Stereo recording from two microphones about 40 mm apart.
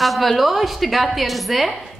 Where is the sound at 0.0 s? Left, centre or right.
Centre.